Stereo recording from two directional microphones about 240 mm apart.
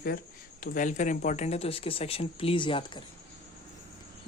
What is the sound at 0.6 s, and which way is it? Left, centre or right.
Speech, left.